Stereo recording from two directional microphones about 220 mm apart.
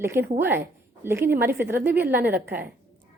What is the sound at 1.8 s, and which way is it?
Speech, 45° right (ahead or behind).